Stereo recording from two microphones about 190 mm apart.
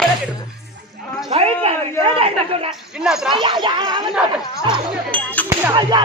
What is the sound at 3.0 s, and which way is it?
Speech, 5° right (ahead or behind).